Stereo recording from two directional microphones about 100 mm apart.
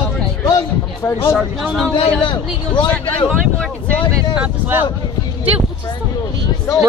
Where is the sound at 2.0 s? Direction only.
60° left (ahead or behind).